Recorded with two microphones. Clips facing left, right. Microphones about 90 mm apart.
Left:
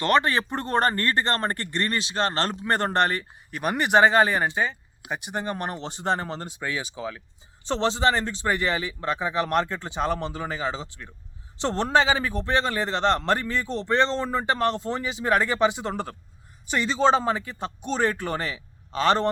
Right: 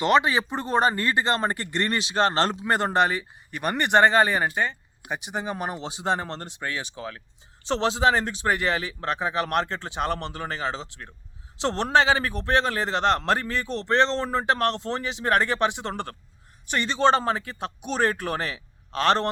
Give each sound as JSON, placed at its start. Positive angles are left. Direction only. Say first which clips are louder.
{"t": 0.0, "sound": "speech", "louder": "right 1 dB", "side_deg": -10}
{"t": 2.1, "sound": "speech", "louder": "right 5 dB", "side_deg": -30}
{"t": 2.6, "sound": "a man's voice", "louder": "left 1 dB", "side_deg": -10}
{"t": 7.7, "sound": "a man's voice", "louder": "right 1 dB", "side_deg": -5}